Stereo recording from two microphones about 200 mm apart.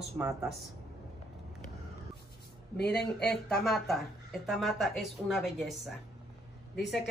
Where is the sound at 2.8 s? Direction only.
55° left (ahead or behind).